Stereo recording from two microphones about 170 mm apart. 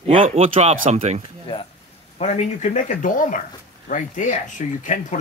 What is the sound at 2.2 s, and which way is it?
Speech, 40° left (ahead or behind).